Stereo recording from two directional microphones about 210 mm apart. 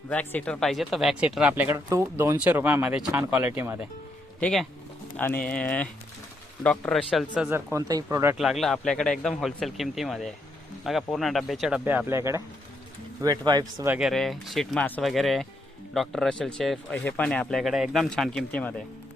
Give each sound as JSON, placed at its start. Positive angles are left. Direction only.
{"t": 0.1, "sound": "speech", "side_deg": 5}
{"t": 4.4, "sound": "speech", "side_deg": 5}
{"t": 8.4, "sound": "speech", "side_deg": 0}
{"t": 13.9, "sound": "speech", "side_deg": 0}